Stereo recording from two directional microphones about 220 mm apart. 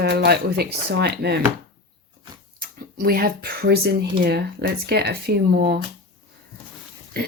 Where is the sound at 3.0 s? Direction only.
45° right (ahead or behind).